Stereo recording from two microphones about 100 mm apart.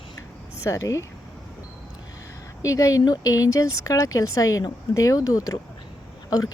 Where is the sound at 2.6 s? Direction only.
35° left (ahead or behind).